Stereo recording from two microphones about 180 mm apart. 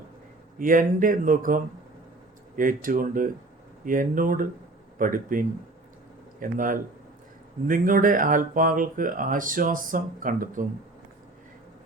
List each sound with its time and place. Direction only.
0.6 s speech: 50° right (ahead or behind)